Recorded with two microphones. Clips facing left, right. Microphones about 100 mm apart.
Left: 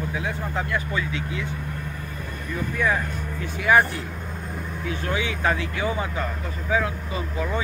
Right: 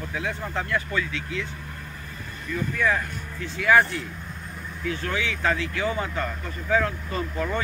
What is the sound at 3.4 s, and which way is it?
Speech, 15° left (ahead or behind).